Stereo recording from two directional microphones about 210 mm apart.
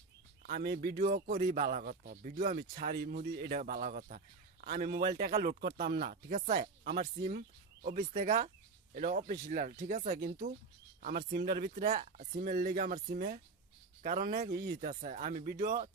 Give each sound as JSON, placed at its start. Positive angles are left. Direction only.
{"t": 0.5, "sound": "speech", "side_deg": -50}